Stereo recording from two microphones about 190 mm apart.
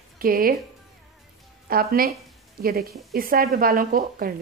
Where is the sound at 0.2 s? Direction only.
50° right (ahead or behind).